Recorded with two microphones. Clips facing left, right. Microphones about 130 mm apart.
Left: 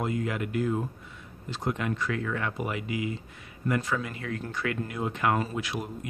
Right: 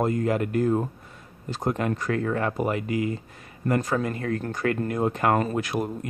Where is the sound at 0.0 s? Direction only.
45° right (ahead or behind).